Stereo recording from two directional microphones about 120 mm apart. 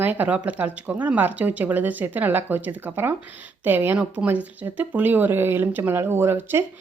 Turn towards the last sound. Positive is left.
turn(degrees=-20)  # may be behind; listen again after turning